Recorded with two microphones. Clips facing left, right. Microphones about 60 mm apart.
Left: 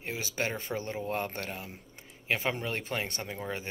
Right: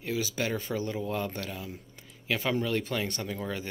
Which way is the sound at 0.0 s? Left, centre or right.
Left.